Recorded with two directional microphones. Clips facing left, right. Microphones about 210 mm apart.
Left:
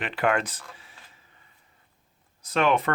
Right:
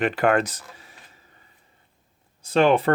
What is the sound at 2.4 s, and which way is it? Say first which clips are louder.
Speech: right 5 dB; 30° right (ahead or behind).